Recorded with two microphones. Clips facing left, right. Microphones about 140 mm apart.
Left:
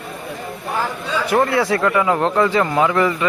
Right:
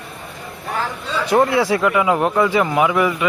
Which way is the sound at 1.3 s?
10° right (ahead or behind).